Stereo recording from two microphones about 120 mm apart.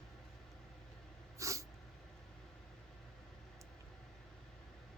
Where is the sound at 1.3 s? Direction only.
25° right (ahead or behind).